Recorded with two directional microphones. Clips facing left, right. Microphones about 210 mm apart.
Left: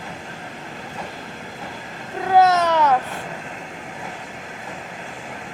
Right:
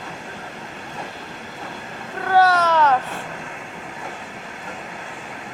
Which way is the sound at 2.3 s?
20° left (ahead or behind).